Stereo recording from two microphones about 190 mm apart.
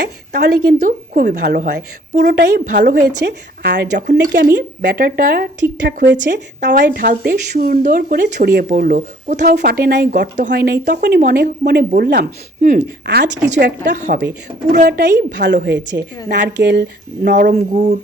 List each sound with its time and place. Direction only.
0.3 s speech: 45° right (ahead or behind)
1.5 s a woman's voice: 55° right (ahead or behind); by 9.6 s 40° right (ahead or behind)
9.6 s a woman's voice: 55° right (ahead or behind)
11.2 s speech: 50° right (ahead or behind)
14.8 s a woman's voice: 55° right (ahead or behind)
17.7 s speech: 35° right (ahead or behind)